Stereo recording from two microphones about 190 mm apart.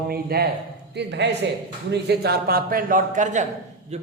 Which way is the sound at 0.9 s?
65° right (ahead or behind).